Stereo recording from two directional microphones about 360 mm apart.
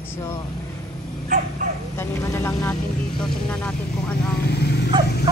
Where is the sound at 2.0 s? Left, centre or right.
Centre.